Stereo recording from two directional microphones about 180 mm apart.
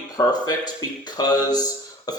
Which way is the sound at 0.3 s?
20° left (ahead or behind).